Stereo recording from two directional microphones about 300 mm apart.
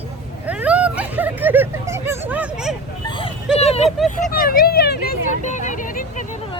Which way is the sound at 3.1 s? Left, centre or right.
Centre.